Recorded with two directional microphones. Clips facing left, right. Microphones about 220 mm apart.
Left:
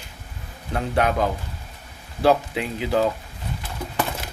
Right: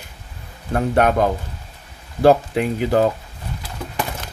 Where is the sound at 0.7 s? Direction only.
50° right (ahead or behind).